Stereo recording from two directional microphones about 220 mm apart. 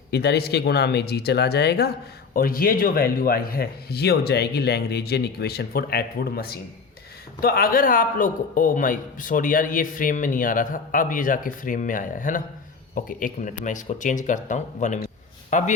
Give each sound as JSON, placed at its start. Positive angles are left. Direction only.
{"t": 0.1, "sound": "a man's voice", "side_deg": 50}